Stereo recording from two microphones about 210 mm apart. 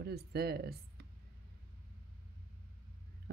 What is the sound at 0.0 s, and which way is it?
Speech, 50° right (ahead or behind).